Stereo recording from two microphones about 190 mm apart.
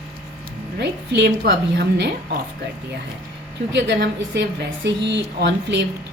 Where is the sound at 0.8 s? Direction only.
65° right (ahead or behind).